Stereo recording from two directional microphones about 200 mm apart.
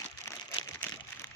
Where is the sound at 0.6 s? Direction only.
30° left (ahead or behind).